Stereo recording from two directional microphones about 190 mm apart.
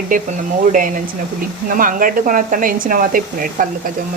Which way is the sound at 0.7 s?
45° right (ahead or behind).